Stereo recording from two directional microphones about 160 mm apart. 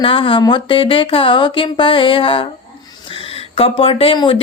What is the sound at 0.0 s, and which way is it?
Speech, 35° left (ahead or behind).